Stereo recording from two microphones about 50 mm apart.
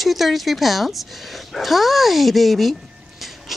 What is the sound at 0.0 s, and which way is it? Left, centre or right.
A woman's voice, centre.